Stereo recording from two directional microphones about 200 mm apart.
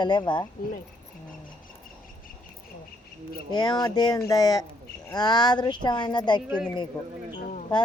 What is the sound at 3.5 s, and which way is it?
Speech, 20° left (ahead or behind).